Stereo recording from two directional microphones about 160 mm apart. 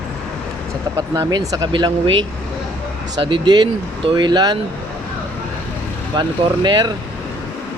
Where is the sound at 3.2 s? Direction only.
30° right (ahead or behind).